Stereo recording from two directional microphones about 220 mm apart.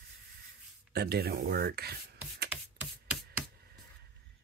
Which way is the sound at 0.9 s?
45° right (ahead or behind).